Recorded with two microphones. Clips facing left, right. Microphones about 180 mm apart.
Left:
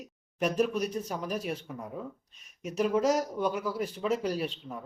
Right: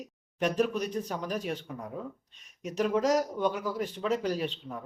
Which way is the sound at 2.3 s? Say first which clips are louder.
Even; 40° right (ahead or behind).